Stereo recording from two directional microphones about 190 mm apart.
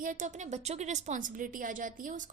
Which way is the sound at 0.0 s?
45° right (ahead or behind).